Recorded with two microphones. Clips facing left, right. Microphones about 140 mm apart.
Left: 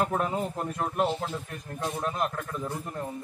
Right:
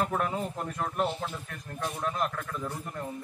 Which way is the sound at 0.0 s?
30° left (ahead or behind).